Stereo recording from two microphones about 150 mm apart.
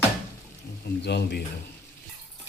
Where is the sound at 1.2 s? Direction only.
90° left.